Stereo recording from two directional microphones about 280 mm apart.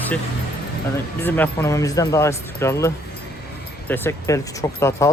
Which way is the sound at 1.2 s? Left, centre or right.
Centre.